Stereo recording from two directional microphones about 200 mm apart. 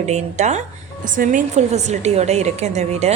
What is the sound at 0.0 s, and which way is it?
A woman's voice, 35° right (ahead or behind).